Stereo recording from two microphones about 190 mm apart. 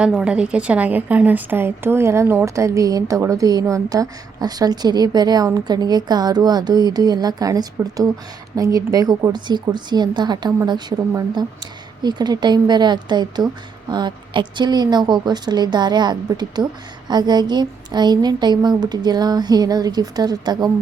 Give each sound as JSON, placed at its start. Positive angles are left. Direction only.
{"t": 0.0, "sound": "a woman's voice", "side_deg": -5}